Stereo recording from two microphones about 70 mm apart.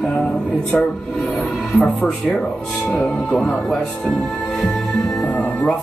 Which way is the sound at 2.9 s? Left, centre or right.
Centre.